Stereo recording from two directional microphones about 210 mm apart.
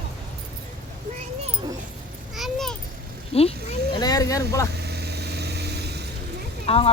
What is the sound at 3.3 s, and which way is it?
Vehicle, 30° left (ahead or behind).